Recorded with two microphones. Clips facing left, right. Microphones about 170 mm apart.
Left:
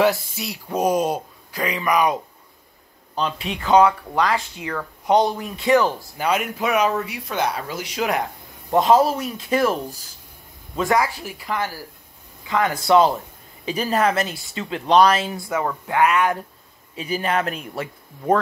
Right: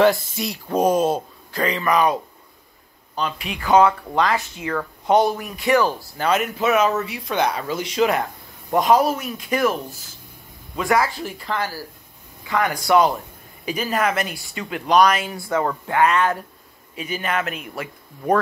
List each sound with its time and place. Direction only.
0.0 s speech: 5° left (ahead or behind)
3.2 s speech: 30° left (ahead or behind)
3.6 s speech: 20° left (ahead or behind)
5.0 s speech: 20° left (ahead or behind)
6.1 s speech: 10° left (ahead or behind)
8.7 s speech: 25° left (ahead or behind)
10.9 s speech: 15° left (ahead or behind)
15.4 s speech: 10° left (ahead or behind)
16.9 s speech: 30° left (ahead or behind)
17.7 s speech: 20° left (ahead or behind)